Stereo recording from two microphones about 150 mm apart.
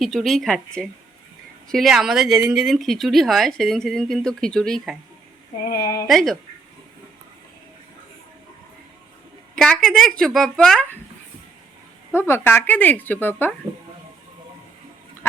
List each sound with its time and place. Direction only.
0.0 s speech: centre (ahead or behind)
5.6 s speech: 90° left
6.1 s speech: centre (ahead or behind)
9.6 s speech: centre (ahead or behind)
12.3 s speech: 15° left (ahead or behind)